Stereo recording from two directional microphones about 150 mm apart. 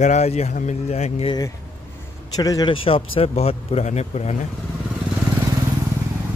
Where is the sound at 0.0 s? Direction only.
50° left (ahead or behind).